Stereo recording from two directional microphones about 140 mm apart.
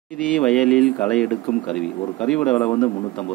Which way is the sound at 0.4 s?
5° left (ahead or behind).